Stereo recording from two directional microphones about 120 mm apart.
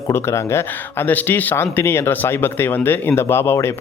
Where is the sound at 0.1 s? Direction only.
20° left (ahead or behind).